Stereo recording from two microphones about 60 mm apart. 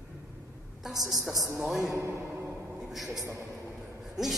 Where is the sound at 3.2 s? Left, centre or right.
Right.